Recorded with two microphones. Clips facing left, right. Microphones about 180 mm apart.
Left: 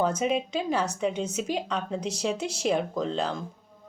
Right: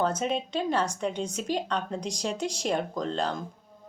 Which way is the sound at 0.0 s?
10° left (ahead or behind).